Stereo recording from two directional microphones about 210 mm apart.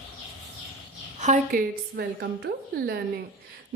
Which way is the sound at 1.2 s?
40° right (ahead or behind).